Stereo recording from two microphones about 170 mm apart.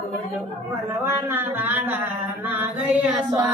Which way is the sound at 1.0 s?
15° right (ahead or behind).